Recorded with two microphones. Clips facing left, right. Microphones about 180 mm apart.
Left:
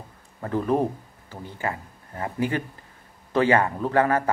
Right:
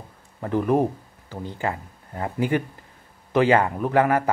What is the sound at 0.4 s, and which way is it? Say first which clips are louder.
Speech: right 2 dB; 15° right (ahead or behind).